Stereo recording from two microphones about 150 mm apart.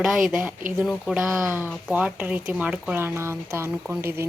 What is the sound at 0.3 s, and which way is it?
Speech, 5° right (ahead or behind).